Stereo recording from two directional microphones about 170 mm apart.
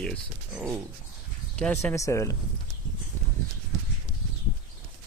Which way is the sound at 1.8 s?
15° left (ahead or behind).